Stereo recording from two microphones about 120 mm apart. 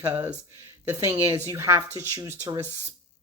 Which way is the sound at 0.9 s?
25° right (ahead or behind).